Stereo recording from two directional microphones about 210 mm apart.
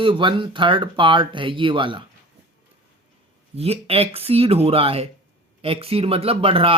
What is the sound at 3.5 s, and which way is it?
Speech, 30° right (ahead or behind).